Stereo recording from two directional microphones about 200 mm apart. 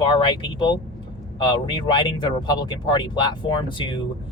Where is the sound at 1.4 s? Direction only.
25° left (ahead or behind).